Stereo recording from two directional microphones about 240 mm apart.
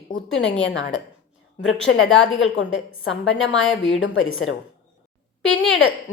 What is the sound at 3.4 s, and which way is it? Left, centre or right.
Speech, left.